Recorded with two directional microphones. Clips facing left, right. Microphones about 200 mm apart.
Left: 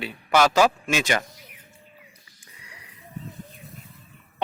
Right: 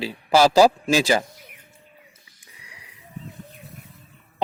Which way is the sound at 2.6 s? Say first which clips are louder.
Left 1 dB; 10° right (ahead or behind).